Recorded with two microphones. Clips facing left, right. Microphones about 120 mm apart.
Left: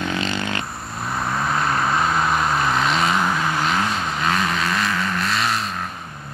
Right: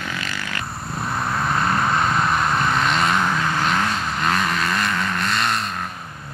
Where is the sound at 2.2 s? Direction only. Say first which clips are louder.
Even; centre (ahead or behind).